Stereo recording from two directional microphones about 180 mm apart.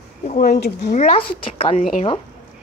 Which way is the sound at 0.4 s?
55° left (ahead or behind).